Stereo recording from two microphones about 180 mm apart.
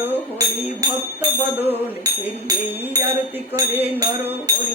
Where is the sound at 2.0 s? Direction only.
20° right (ahead or behind).